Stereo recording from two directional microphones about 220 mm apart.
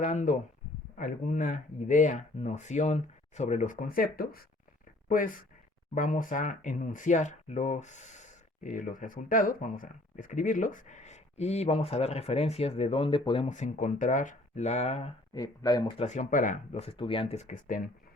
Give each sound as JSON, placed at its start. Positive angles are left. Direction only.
{"t": 0.0, "sound": "speech", "side_deg": 35}
{"t": 15.4, "sound": "speech", "side_deg": 15}
{"t": 16.0, "sound": "speech", "side_deg": 35}